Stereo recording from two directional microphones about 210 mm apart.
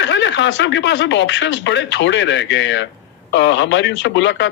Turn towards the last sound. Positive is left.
turn(degrees=60)  # may be behind; listen again after turning